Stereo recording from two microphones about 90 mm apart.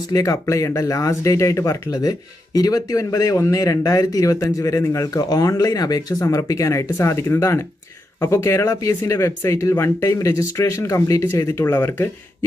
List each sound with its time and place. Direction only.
0.1 s speech: 40° left (ahead or behind)